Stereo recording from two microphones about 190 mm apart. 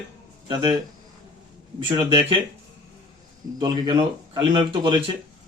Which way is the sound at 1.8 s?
25° right (ahead or behind).